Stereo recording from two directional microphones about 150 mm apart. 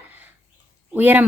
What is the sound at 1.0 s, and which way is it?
Speech, 10° right (ahead or behind).